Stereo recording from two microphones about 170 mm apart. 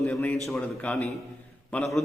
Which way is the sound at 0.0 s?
5° left (ahead or behind).